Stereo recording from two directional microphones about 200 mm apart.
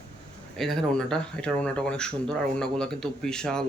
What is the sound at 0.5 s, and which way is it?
Speech, centre (ahead or behind).